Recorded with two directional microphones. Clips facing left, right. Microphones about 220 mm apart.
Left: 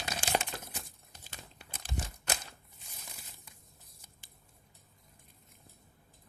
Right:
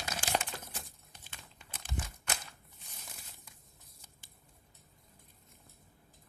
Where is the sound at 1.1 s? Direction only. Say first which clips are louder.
Left 4 dB; 40° left (ahead or behind).